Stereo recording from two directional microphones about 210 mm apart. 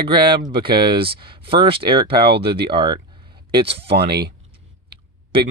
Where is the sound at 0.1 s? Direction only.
20° right (ahead or behind).